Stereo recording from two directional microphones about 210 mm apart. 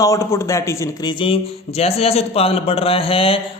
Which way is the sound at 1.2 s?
30° left (ahead or behind).